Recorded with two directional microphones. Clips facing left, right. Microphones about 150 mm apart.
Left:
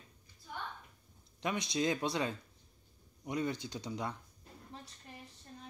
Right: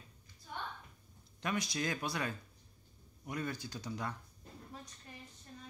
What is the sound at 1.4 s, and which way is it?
Speech, 20° left (ahead or behind).